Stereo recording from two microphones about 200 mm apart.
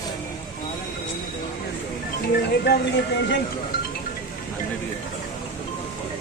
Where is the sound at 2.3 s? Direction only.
55° left (ahead or behind).